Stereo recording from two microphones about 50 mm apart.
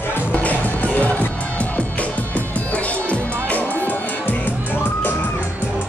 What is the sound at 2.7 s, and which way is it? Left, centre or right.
Music, left.